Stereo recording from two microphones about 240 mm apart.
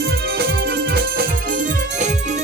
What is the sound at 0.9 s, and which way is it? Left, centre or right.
Music, right.